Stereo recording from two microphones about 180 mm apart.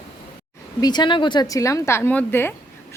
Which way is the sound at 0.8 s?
25° left (ahead or behind).